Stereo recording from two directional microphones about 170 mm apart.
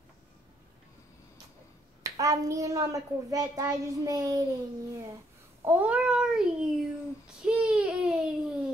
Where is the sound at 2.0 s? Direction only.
20° right (ahead or behind).